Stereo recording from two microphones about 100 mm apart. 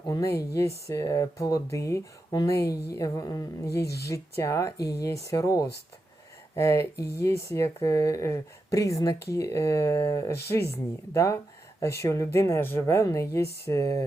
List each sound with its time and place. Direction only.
0.1 s speech: 35° left (ahead or behind)